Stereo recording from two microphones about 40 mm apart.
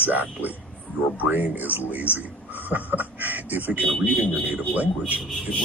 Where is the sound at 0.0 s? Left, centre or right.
Right.